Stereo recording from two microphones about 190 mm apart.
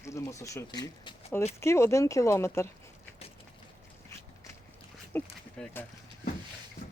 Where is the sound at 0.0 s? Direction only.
15° left (ahead or behind).